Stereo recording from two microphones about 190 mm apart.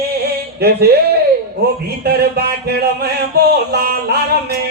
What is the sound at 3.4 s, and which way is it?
Music, 60° right (ahead or behind).